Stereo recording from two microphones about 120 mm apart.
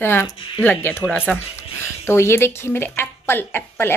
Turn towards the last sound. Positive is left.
turn(degrees=20)  # may be behind; listen again after turning